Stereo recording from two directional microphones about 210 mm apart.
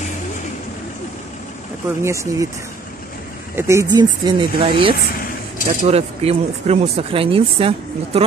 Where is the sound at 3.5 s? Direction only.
15° right (ahead or behind).